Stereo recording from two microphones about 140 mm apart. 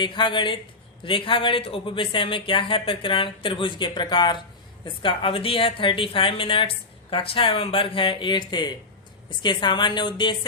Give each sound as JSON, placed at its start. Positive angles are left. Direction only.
{"t": 0.0, "sound": "a woman's voice", "side_deg": 35}